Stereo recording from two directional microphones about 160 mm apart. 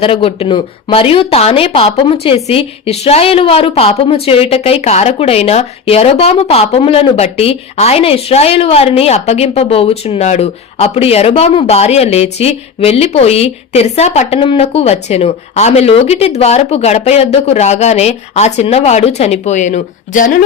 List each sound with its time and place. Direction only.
0.0 s a woman's voice: 35° left (ahead or behind); by 20.4 s 55° left (ahead or behind)